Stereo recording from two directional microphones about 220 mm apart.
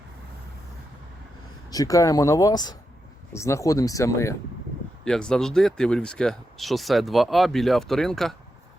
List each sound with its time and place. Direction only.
1.7 s speech: 15° left (ahead or behind)